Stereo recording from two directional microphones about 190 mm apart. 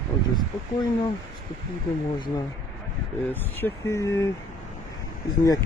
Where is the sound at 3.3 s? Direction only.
10° left (ahead or behind).